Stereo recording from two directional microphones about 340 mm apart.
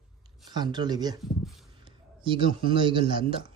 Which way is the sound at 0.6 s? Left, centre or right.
Centre.